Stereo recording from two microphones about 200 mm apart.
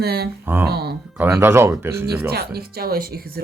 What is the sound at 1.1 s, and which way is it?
Speech, 10° right (ahead or behind).